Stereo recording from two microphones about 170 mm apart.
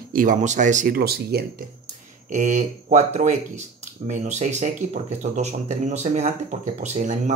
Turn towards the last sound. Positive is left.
turn(degrees=-45)  # may be behind; listen again after turning